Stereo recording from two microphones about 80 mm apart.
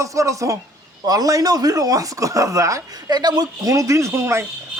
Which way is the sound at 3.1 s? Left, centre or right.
Right.